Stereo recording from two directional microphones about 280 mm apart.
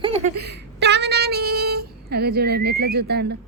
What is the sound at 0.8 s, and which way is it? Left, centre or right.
Child singing, right.